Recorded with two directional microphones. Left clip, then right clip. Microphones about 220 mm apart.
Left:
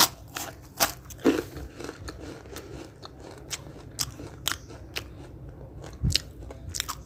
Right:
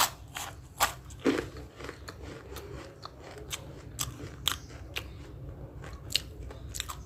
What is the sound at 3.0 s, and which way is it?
Crunch, 15° left (ahead or behind).